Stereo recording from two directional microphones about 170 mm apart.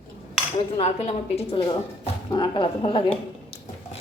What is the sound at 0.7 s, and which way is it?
A woman's voice, 40° left (ahead or behind).